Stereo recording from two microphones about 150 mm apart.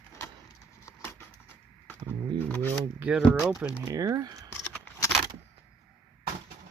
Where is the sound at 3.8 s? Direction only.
20° right (ahead or behind).